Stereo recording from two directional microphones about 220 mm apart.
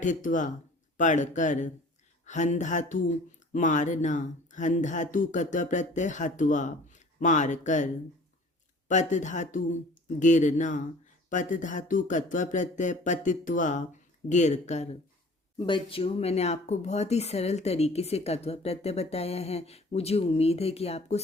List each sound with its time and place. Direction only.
0.0 s speech: 35° left (ahead or behind)
8.9 s speech: 35° left (ahead or behind)